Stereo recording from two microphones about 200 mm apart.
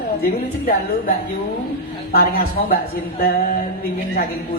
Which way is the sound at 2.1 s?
50° left (ahead or behind).